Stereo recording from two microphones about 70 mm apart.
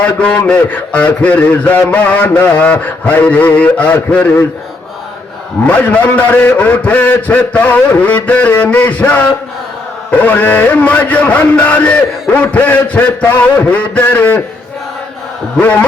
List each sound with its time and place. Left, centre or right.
0.0 s a man's voice: centre
5.6 s a man's voice: left